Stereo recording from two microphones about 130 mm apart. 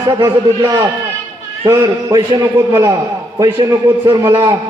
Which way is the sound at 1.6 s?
30° right (ahead or behind).